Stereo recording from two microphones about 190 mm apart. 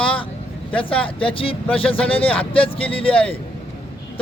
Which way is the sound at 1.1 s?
30° left (ahead or behind).